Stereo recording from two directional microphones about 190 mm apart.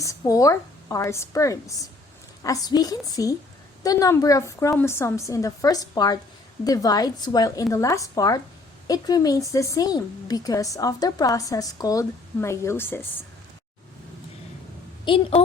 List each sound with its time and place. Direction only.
0.0 s a woman's voice: 15° left (ahead or behind)
15.0 s a woman's voice: 30° left (ahead or behind)